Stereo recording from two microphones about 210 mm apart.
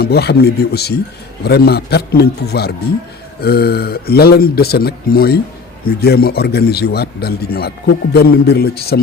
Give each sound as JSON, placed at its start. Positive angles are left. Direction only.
{"t": 0.0, "sound": "speech", "side_deg": 50}